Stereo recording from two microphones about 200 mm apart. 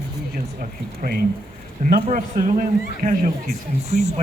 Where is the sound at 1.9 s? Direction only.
40° right (ahead or behind).